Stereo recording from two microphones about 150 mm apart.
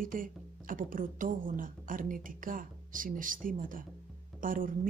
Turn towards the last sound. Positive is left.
turn(degrees=-65)  # may be behind; listen again after turning